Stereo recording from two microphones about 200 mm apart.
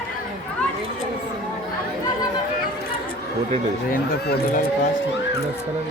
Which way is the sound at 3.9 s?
45° left (ahead or behind).